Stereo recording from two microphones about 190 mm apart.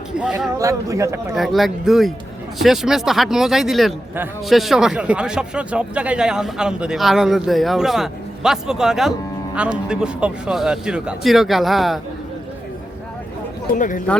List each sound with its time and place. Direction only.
0.2 s speech: 5° right (ahead or behind)
0.6 s speech: 15° right (ahead or behind)
1.4 s speech: centre (ahead or behind)
13.7 s speech: 45° left (ahead or behind)